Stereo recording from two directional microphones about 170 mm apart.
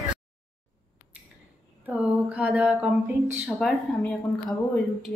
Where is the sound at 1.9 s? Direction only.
5° right (ahead or behind).